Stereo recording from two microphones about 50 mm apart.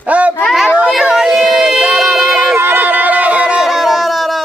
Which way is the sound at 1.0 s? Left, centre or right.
Centre.